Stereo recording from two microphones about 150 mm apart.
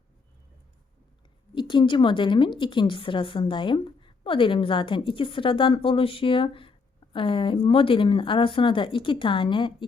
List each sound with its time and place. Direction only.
1.5 s a woman's voice: 30° left (ahead or behind)